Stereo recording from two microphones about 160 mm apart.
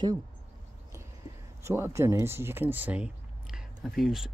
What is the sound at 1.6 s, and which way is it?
Speech, 15° right (ahead or behind).